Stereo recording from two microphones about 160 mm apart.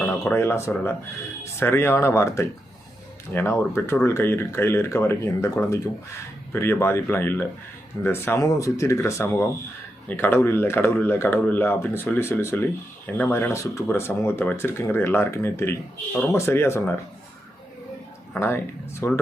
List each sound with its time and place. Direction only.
0.0 s speech: 10° left (ahead or behind)
3.6 s speech: 15° left (ahead or behind)
18.3 s speech: 15° left (ahead or behind)